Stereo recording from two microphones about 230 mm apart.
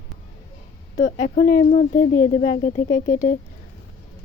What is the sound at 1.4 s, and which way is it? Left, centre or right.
Speech, left.